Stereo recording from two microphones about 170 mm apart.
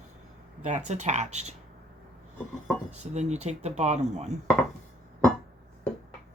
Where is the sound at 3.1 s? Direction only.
40° right (ahead or behind).